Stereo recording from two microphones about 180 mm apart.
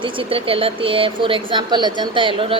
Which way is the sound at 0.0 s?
30° right (ahead or behind).